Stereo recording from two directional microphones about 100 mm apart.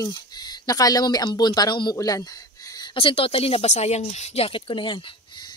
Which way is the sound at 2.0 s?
40° left (ahead or behind).